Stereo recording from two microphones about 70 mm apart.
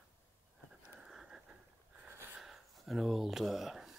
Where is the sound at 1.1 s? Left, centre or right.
Centre.